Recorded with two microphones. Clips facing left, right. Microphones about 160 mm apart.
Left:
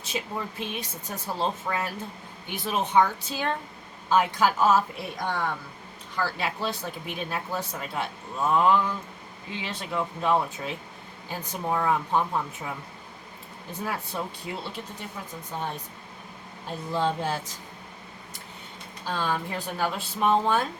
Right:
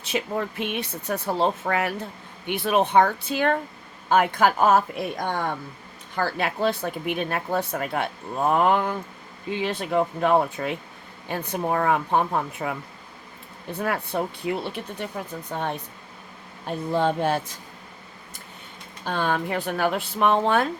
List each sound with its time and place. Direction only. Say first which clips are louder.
0.0 s speech: right 6 dB; 65° right (ahead or behind)
13.7 s speech: right 6 dB; 65° right (ahead or behind)
19.0 s speech: right 4 dB; 60° right (ahead or behind)